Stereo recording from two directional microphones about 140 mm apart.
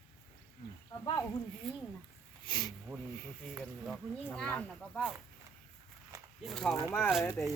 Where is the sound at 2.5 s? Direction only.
30° left (ahead or behind).